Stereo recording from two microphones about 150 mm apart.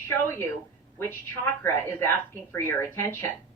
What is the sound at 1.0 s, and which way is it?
A woman's voice, 15° left (ahead or behind).